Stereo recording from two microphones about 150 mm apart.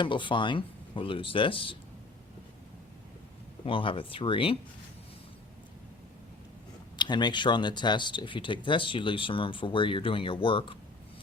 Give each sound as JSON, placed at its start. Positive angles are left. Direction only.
{"t": 0.0, "sound": "speech", "side_deg": 35}
{"t": 3.7, "sound": "speech", "side_deg": 35}
{"t": 6.9, "sound": "speech", "side_deg": 30}